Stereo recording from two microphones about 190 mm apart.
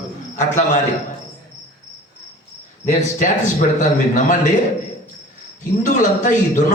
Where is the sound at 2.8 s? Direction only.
40° left (ahead or behind).